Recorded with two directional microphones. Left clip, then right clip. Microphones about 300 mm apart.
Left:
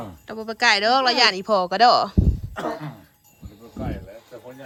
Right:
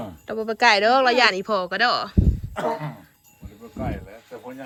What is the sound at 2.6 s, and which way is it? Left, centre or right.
Speech, right.